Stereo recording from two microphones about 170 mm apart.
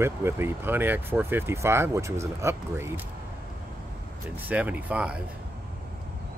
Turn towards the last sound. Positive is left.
turn(degrees=-10)  # may be behind; listen again after turning